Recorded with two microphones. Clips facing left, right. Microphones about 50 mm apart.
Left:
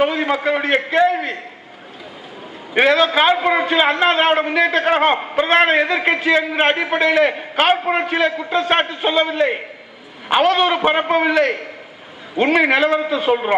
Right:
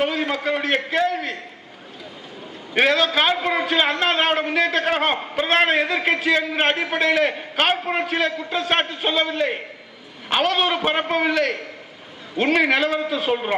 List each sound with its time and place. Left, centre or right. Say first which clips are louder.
0.0 s a man's voice: left 5 dB; centre
2.7 s a man's voice: left 4 dB; centre
5.2 s a sound: left 5 dB; centre
5.5 s a man's voice: left 4 dB; centre